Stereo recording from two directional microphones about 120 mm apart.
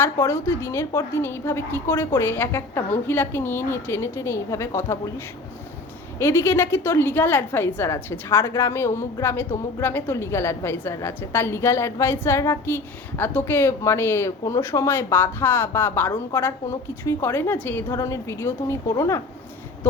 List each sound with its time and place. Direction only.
0.0 s a woman's voice: 20° left (ahead or behind)
6.1 s a woman's voice: 20° left (ahead or behind)